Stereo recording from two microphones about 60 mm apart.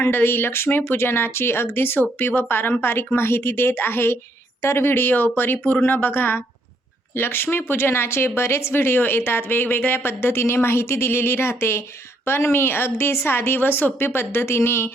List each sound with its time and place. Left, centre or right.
0.0 s speech: left